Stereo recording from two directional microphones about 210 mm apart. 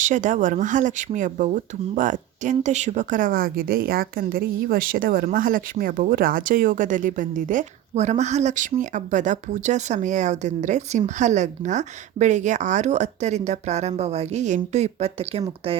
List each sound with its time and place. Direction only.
0.0 s speech: 35° right (ahead or behind)